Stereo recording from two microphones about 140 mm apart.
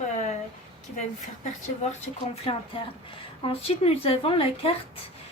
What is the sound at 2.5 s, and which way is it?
Speech, 40° left (ahead or behind).